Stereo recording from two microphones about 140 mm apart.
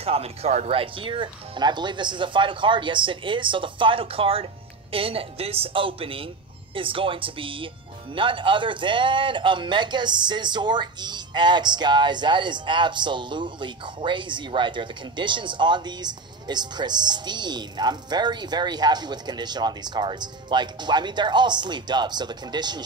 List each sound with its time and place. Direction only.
0.0 s speech: 45° right (ahead or behind); by 22.8 s 30° right (ahead or behind)